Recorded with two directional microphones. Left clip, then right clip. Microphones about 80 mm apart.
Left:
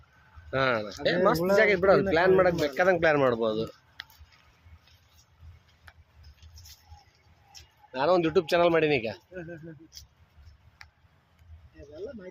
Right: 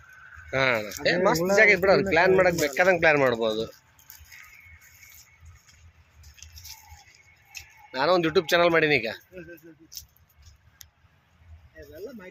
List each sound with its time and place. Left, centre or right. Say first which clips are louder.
0.5 s a man's voice: right 2 dB; centre
1.0 s speech: right 1 dB; centre
2.0 s a man's voice: right 2 dB; centre
7.9 s speech: right 2 dB; right